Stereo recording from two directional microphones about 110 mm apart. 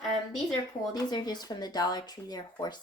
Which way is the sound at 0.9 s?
40° left (ahead or behind).